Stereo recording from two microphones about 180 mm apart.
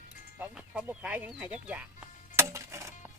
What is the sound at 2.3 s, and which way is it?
Music, 15° right (ahead or behind).